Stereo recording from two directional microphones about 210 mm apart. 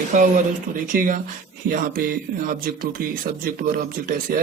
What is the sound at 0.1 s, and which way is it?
Speech, 35° right (ahead or behind).